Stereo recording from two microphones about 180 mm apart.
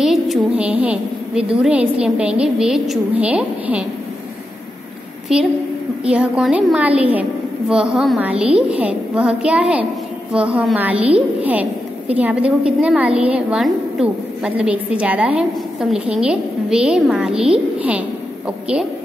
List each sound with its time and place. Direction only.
0.0 s a woman's voice: centre (ahead or behind)
5.3 s a woman's voice: 5° right (ahead or behind)